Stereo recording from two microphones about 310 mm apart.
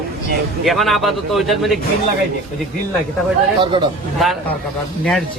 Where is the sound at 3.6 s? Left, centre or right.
Centre.